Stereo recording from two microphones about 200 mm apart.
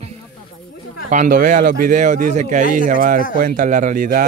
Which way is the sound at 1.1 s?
40° right (ahead or behind).